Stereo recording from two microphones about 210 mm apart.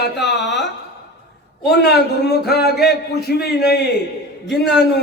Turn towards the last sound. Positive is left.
turn(degrees=0)  # may be behind; listen again after turning